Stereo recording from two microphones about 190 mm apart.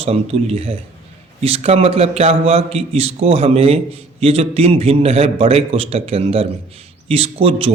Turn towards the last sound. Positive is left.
turn(degrees=-30)  # may be behind; listen again after turning